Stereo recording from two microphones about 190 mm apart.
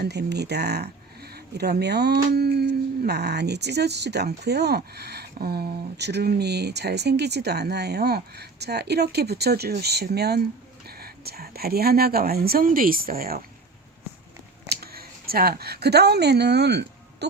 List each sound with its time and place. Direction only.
0.0 s speech: 60° right (ahead or behind)
14.7 s speech: 55° right (ahead or behind)